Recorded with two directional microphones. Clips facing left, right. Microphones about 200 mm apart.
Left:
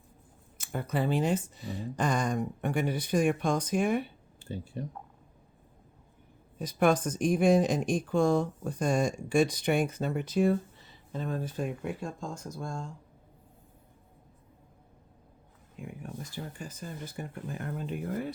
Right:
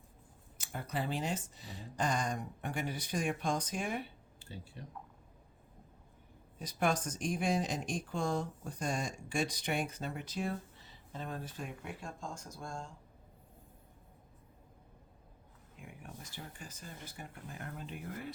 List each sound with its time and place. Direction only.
0.6 s speech: 55° left (ahead or behind)
6.6 s speech: 55° left (ahead or behind)
16.6 s speech: 45° left (ahead or behind)